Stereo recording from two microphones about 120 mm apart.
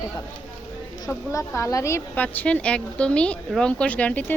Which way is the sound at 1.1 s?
25° left (ahead or behind).